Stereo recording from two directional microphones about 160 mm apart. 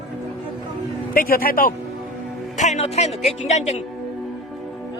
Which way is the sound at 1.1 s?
65° left (ahead or behind).